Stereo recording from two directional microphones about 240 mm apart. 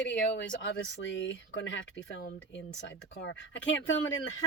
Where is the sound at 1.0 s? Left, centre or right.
Left.